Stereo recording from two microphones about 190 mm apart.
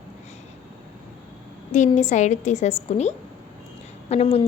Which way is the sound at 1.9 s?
40° left (ahead or behind).